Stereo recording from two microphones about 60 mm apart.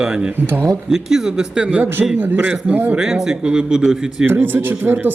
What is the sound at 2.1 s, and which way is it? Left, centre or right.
Speech, right.